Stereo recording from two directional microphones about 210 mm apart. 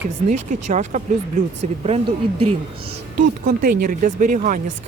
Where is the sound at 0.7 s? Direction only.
35° right (ahead or behind).